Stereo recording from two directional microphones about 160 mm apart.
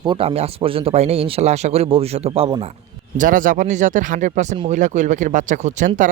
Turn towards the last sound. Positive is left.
turn(degrees=-50)  # may be behind; listen again after turning